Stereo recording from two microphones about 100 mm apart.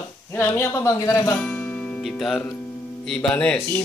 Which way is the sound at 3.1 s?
10° left (ahead or behind).